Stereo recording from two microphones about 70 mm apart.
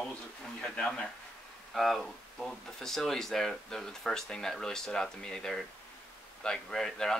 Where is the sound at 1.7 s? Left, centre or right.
Centre.